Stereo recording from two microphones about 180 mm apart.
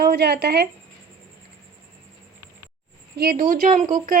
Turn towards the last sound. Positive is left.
turn(degrees=-45)  # may be behind; listen again after turning